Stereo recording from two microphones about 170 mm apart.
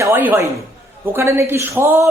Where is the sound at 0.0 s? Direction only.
10° right (ahead or behind).